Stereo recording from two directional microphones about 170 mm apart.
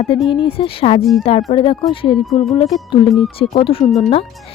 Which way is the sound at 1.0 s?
Centre (ahead or behind).